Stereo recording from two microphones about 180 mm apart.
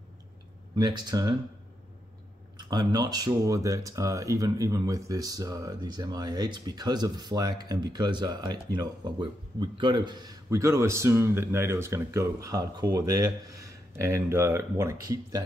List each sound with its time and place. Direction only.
0.7 s speech: 25° right (ahead or behind)
2.5 s speech: 25° right (ahead or behind)